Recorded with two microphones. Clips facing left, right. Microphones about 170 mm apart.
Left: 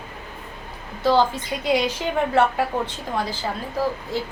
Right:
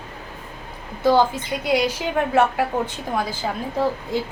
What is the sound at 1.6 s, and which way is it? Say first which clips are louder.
Speech: right 1 dB; 5° right (ahead or behind).